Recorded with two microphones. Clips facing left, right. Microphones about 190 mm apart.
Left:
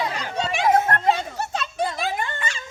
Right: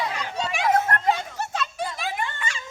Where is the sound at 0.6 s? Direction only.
30° left (ahead or behind).